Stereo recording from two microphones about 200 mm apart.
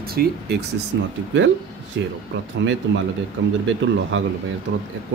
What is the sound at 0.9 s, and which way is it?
Speech, 60° right (ahead or behind).